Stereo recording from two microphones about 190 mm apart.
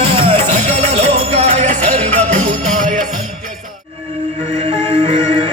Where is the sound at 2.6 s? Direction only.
45° right (ahead or behind).